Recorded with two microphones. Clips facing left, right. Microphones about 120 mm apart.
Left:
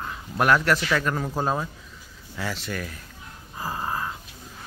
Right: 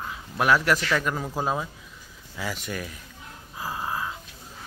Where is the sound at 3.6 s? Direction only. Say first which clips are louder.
Left 1 dB; centre (ahead or behind).